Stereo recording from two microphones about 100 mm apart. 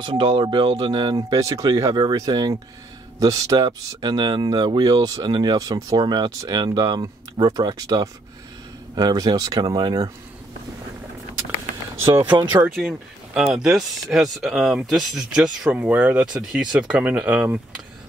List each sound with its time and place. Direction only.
0.0 s speech: 50° right (ahead or behind)
12.0 s speech: 25° right (ahead or behind)
13.3 s speech: 5° right (ahead or behind)